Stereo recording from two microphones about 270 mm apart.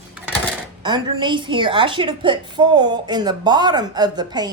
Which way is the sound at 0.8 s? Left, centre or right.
Centre.